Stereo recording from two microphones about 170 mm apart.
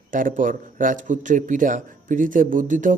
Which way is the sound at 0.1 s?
50° right (ahead or behind).